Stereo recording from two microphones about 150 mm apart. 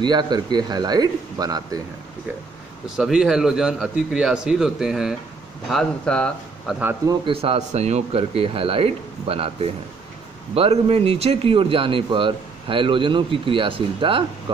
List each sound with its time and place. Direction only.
0.0 s a man's voice: 30° right (ahead or behind)
3.0 s a man's voice: 5° right (ahead or behind)
7.1 s speech: 35° right (ahead or behind)